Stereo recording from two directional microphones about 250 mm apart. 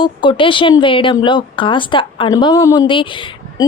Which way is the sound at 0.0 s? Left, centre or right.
Centre.